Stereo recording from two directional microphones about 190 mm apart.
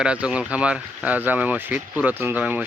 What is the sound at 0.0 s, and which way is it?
Speech, 5° right (ahead or behind).